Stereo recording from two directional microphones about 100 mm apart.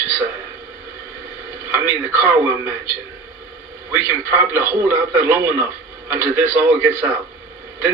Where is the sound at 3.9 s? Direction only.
25° right (ahead or behind).